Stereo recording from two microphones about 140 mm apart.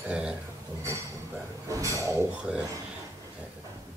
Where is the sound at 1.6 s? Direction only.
25° right (ahead or behind).